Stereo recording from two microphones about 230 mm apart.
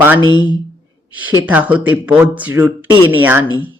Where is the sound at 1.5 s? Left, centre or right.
Centre.